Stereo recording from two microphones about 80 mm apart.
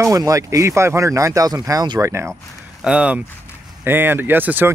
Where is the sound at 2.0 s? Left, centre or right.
Right.